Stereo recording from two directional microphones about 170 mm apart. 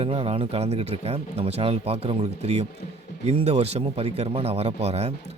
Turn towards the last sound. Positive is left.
turn(degrees=-35)  # may be behind; listen again after turning